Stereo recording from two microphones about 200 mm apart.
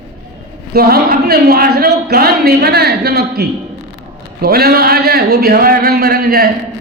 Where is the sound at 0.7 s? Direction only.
50° right (ahead or behind).